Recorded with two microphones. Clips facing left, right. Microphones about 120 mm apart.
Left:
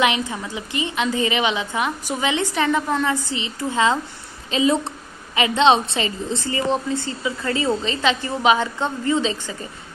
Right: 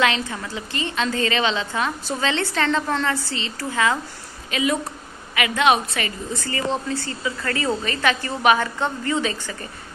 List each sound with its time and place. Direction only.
0.0 s a woman's voice: 15° left (ahead or behind)